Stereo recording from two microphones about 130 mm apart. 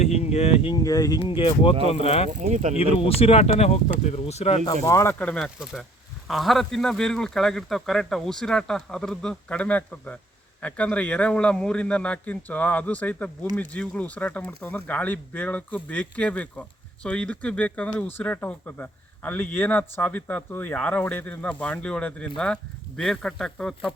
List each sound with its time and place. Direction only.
0.0 s speech: 55° left (ahead or behind)
0.7 s speech: 25° left (ahead or behind)
1.2 s speech: 40° left (ahead or behind)
2.3 s speech: 70° right (ahead or behind)
2.7 s speech: 50° left (ahead or behind)
4.7 s speech: 25° left (ahead or behind)
5.2 s a man's voice: 10° left (ahead or behind)